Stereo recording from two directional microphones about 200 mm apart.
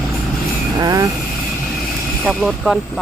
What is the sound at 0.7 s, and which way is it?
Vehicle, 20° right (ahead or behind).